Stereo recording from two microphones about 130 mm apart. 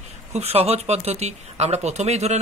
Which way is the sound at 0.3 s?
55° right (ahead or behind).